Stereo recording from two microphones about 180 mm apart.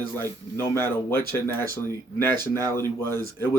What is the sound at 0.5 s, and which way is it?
Speech, 15° left (ahead or behind).